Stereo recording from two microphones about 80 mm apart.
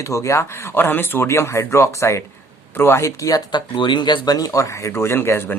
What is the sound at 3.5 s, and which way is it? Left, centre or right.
Speech, left.